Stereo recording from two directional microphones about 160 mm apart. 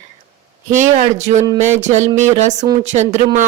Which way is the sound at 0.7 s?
45° right (ahead or behind).